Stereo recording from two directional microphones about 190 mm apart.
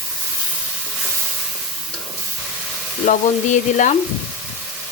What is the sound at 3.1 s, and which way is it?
Frying, 40° left (ahead or behind).